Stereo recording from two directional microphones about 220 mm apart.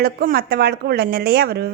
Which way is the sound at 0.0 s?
45° right (ahead or behind).